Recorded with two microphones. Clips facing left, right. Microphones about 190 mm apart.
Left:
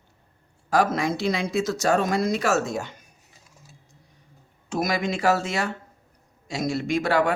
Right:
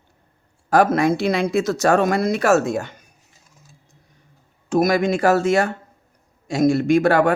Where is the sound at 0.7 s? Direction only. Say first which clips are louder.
Right 6 dB; 55° right (ahead or behind).